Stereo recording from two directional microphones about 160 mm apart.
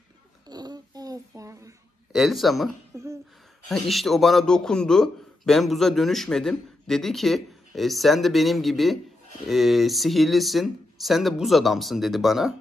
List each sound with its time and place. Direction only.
0.5 s babbling: 25° right (ahead or behind)
2.1 s a man's voice: centre (ahead or behind)
2.9 s a sound: 20° right (ahead or behind)
3.6 s a man's voice: centre (ahead or behind)